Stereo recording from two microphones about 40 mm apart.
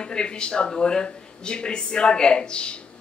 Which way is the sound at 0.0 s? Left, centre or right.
Left.